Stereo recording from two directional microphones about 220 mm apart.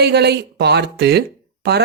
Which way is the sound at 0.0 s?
50° right (ahead or behind).